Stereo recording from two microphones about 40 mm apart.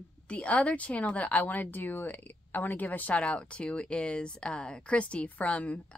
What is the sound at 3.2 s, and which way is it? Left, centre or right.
Speech, left.